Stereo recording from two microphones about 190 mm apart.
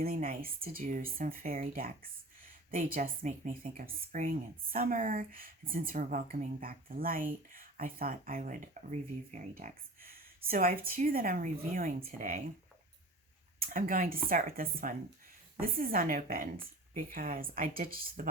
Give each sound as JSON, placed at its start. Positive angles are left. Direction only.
{"t": 0.0, "sound": "speech", "side_deg": -50}
{"t": 13.6, "sound": "speech", "side_deg": -45}